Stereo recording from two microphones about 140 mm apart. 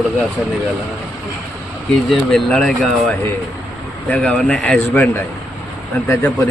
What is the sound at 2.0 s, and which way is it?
A man's voice, 5° left (ahead or behind).